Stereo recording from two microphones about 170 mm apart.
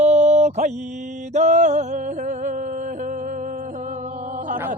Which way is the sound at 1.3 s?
45° right (ahead or behind).